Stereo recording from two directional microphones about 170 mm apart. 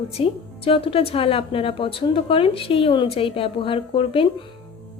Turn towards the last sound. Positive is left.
turn(degrees=30)  # may be behind; listen again after turning